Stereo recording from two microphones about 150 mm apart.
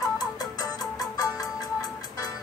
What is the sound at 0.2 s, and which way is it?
Music, 25° left (ahead or behind).